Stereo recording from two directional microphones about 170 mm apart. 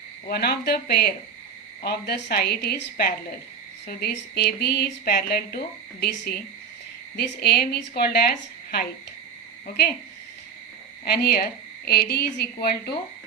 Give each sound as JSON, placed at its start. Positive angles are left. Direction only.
{"t": 0.3, "sound": "speech", "side_deg": 70}
{"t": 11.0, "sound": "speech", "side_deg": 70}